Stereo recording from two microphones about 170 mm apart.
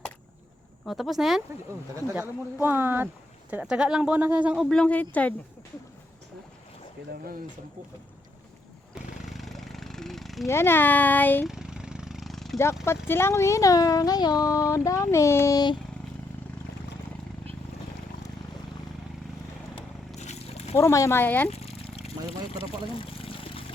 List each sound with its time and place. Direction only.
0.9 s speech: centre (ahead or behind)
2.1 s speech: 10° right (ahead or behind); by 5.3 s 10° left (ahead or behind)
9.2 s a sound: centre (ahead or behind)
10.4 s a child's voice: 15° left (ahead or behind)
11.4 s vehicle: 5° right (ahead or behind)
13.1 s speech: 15° left (ahead or behind)
20.1 s a sound: 40° left (ahead or behind)
20.7 s a child's voice: 15° left (ahead or behind)
21.5 s a sound: 35° left (ahead or behind)
22.3 s pour: 35° left (ahead or behind)